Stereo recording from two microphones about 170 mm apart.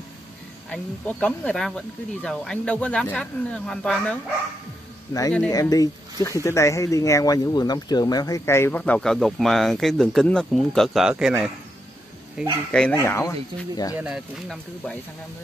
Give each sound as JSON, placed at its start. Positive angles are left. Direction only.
{"t": 0.7, "sound": "speech", "side_deg": 10}
{"t": 5.5, "sound": "speech", "side_deg": 20}
{"t": 13.0, "sound": "speech", "side_deg": 15}
{"t": 13.9, "sound": "speech", "side_deg": -5}